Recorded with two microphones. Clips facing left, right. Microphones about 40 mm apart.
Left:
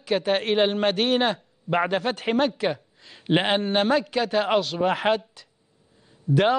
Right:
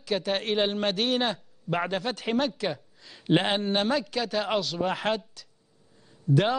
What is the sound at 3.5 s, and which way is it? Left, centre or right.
A man's voice, centre.